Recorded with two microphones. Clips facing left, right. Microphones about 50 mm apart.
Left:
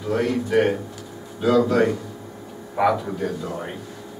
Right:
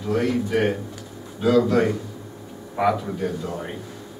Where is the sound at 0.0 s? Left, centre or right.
Centre.